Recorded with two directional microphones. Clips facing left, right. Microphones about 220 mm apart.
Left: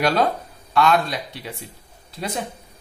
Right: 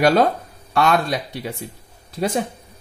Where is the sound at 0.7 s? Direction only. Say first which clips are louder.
Right 1 dB; 50° right (ahead or behind).